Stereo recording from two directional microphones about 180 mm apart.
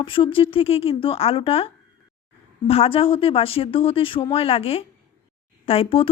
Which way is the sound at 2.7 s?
30° left (ahead or behind).